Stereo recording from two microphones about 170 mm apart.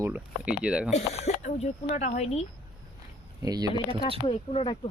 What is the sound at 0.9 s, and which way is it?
Speech, 40° left (ahead or behind).